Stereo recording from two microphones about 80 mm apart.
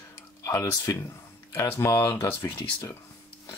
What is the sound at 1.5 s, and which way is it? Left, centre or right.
Speech, left.